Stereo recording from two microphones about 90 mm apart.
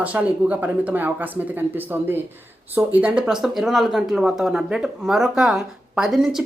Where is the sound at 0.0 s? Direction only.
15° right (ahead or behind).